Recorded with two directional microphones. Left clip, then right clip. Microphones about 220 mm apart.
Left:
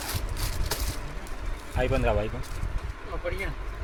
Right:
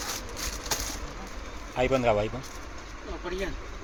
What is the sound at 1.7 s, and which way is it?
Speech, 30° right (ahead or behind).